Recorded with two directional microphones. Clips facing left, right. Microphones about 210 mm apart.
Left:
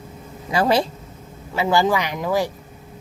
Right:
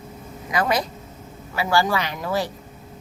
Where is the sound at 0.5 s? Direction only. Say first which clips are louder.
Left 4 dB; 30° left (ahead or behind).